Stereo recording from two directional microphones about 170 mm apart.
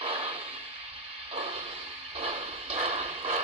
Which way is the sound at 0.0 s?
35° right (ahead or behind).